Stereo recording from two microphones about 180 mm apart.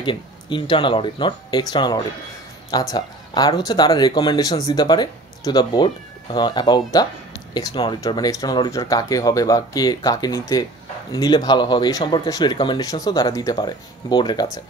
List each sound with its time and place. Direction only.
0.0 s speech: 25° left (ahead or behind)